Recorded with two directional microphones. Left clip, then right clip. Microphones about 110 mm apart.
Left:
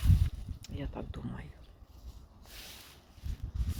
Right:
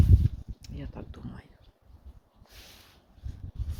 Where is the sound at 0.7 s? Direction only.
5° left (ahead or behind).